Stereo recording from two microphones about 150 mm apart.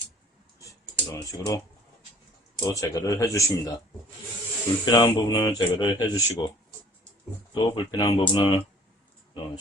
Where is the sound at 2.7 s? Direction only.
20° left (ahead or behind).